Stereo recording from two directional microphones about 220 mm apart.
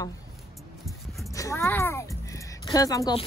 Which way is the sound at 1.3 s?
15° left (ahead or behind).